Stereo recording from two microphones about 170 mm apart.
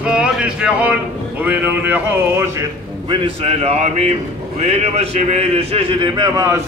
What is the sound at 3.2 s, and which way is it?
A man's voice, 35° right (ahead or behind).